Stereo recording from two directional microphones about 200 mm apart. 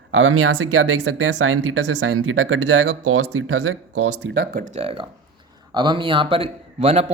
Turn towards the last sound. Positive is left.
turn(degrees=-30)  # may be behind; listen again after turning